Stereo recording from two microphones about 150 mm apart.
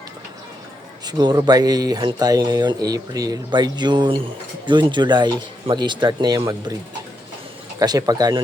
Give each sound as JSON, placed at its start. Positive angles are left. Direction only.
{"t": 1.0, "sound": "speech", "side_deg": -30}
{"t": 7.8, "sound": "speech", "side_deg": -25}